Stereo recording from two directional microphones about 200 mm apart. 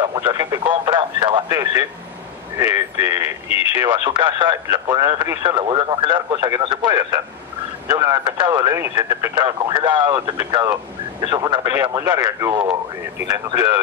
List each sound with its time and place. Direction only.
0.1 s speech: 20° right (ahead or behind)
3.4 s speech: 30° left (ahead or behind)
3.9 s speech: 20° right (ahead or behind)